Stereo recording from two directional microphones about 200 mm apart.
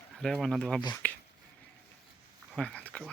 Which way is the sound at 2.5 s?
5° left (ahead or behind).